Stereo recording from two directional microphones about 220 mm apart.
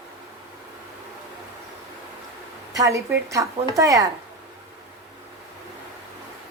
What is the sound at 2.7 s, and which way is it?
A woman's voice, 15° right (ahead or behind).